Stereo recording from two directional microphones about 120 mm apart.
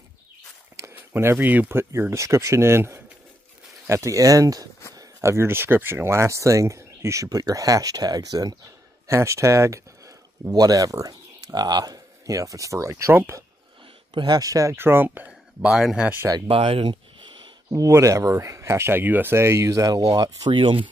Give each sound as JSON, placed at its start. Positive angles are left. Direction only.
{"t": 0.7, "sound": "a sound", "side_deg": -20}
{"t": 1.3, "sound": "speech", "side_deg": -10}
{"t": 14.1, "sound": "speech", "side_deg": -35}
{"t": 16.4, "sound": "speech", "side_deg": -50}
{"t": 17.6, "sound": "speech", "side_deg": -25}